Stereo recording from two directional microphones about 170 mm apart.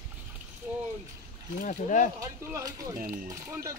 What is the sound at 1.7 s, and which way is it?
Speech, 45° left (ahead or behind).